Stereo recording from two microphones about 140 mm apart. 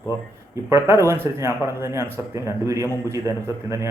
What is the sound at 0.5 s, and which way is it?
Speech, 20° right (ahead or behind).